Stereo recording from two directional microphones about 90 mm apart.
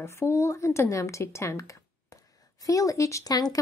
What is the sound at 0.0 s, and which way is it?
Speech, 30° left (ahead or behind).